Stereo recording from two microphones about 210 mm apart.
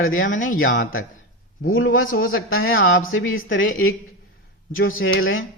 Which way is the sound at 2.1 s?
75° left (ahead or behind).